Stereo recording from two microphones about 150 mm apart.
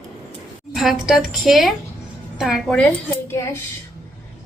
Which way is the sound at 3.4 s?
20° left (ahead or behind).